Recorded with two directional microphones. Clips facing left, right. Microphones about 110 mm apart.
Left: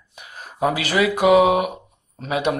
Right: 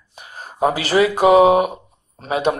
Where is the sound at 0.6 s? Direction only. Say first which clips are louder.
Right 4 dB; 35° right (ahead or behind).